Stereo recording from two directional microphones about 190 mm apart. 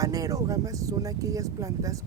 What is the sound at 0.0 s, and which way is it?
Speech, 20° right (ahead or behind).